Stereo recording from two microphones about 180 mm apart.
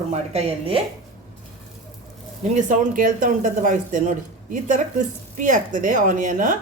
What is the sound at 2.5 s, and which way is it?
A woman's voice, 45° right (ahead or behind).